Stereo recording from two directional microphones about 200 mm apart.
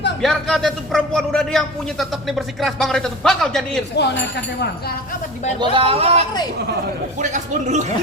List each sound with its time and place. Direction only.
0.2 s a man's voice: centre (ahead or behind)
3.9 s speech: 60° left (ahead or behind)
5.7 s a man's voice: 30° right (ahead or behind)